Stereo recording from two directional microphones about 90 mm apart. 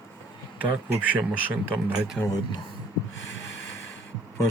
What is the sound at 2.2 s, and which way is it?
Speech, 10° right (ahead or behind).